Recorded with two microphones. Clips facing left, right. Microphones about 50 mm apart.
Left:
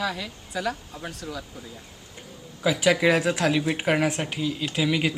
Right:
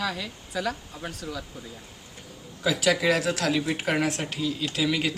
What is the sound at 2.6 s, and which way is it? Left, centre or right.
Speech, centre.